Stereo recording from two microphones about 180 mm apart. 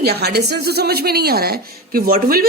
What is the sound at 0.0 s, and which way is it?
A woman's voice, 65° right (ahead or behind).